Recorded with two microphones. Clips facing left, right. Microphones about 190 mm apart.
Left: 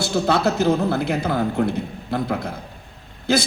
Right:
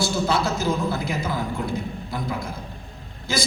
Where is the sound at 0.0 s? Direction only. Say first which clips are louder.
Left 3 dB; 60° left (ahead or behind).